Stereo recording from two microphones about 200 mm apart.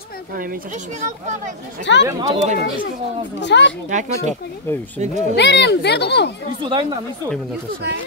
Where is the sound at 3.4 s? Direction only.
60° left (ahead or behind).